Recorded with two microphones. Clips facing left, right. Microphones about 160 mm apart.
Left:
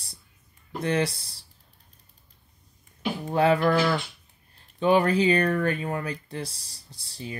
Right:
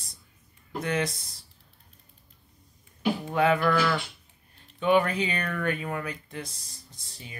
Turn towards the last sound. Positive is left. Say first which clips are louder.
# left 9 dB
turn(degrees=30)  # may be behind; listen again after turning